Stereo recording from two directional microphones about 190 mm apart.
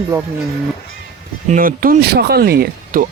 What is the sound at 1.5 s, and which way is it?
Speech, 45° right (ahead or behind).